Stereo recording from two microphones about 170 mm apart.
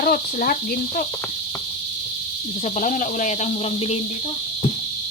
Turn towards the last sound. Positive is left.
turn(degrees=35)  # may be behind; listen again after turning